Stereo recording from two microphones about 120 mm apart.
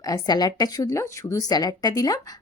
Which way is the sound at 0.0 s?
30° left (ahead or behind).